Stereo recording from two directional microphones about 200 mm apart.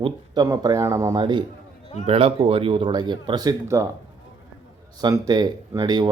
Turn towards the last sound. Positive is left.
turn(degrees=-20)  # may be behind; listen again after turning